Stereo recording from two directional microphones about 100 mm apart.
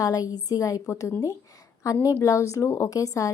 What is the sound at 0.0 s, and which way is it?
A woman's voice, 35° left (ahead or behind).